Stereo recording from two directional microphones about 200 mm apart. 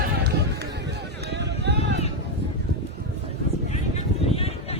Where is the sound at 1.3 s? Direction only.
60° right (ahead or behind).